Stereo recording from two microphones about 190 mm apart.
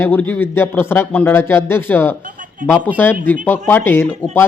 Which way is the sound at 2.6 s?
45° right (ahead or behind).